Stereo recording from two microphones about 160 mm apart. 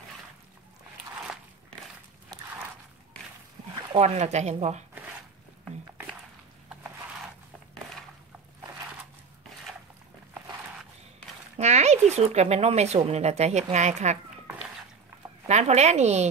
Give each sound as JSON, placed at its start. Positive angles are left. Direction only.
{"t": 2.3, "sound": "a sound", "side_deg": -25}
{"t": 4.0, "sound": "speech", "side_deg": -45}
{"t": 11.5, "sound": "speech", "side_deg": -45}
{"t": 15.4, "sound": "speech", "side_deg": -45}